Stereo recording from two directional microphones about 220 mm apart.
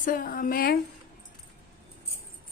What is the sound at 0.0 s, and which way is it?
Speech, 40° left (ahead or behind).